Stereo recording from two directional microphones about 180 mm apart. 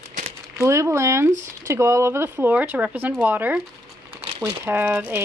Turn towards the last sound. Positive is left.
turn(degrees=-10)  # may be behind; listen again after turning